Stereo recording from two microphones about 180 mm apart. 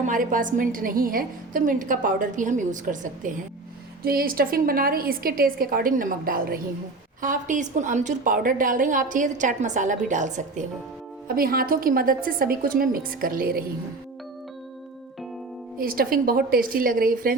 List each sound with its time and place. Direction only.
0.0 s a woman's voice: 45° right (ahead or behind)
11.3 s a woman's voice: 55° right (ahead or behind)
15.8 s a woman's voice: 55° right (ahead or behind)